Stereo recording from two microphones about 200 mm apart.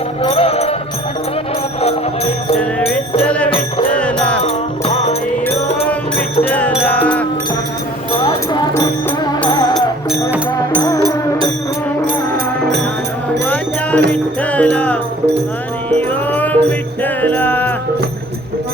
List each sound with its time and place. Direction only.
0.2 s music: 30° left (ahead or behind)
1.8 s music: 30° left (ahead or behind)
3.2 s music: 5° left (ahead or behind)
4.4 s music: 30° left (ahead or behind)
6.5 s music: 5° left (ahead or behind)
8.2 s a sound: 25° left (ahead or behind)
8.7 s music: 15° left (ahead or behind)
9.7 s music: 5° right (ahead or behind)
10.8 s music: 20° left (ahead or behind)
13.4 s music: 5° left (ahead or behind)